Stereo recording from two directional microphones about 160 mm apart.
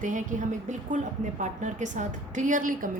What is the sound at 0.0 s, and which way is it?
A woman's voice, 55° right (ahead or behind).